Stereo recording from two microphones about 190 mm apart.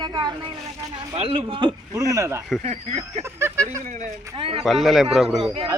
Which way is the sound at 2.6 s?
35° right (ahead or behind).